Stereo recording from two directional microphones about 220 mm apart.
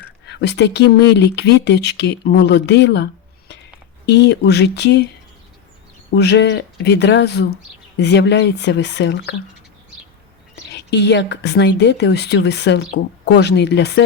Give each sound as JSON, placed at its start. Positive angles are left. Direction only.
{"t": 0.3, "sound": "speech", "side_deg": 50}
{"t": 6.1, "sound": "speech", "side_deg": 50}
{"t": 10.7, "sound": "speech", "side_deg": 50}